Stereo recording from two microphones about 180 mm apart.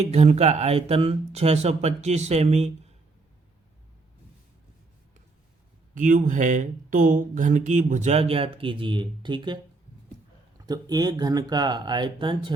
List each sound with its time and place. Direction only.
0.0 s speech: 35° right (ahead or behind)
5.9 s speech: 45° right (ahead or behind); by 9.6 s 25° right (ahead or behind)
10.7 s speech: 20° right (ahead or behind)